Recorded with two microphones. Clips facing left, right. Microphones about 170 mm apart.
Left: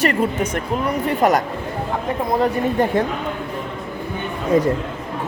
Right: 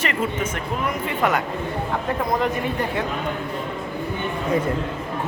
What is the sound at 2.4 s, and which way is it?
Speech, 45° left (ahead or behind).